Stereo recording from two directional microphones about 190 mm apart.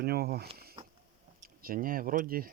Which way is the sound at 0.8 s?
25° right (ahead or behind).